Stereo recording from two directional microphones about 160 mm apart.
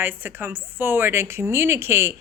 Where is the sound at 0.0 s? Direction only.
10° right (ahead or behind).